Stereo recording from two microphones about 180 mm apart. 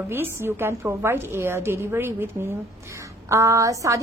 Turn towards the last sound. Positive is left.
turn(degrees=-20)  # may be behind; listen again after turning